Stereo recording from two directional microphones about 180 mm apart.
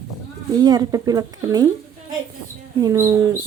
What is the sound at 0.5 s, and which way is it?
Speech, 20° right (ahead or behind).